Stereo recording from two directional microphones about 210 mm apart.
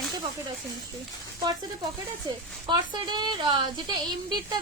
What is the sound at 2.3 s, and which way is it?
A woman's voice, 20° right (ahead or behind).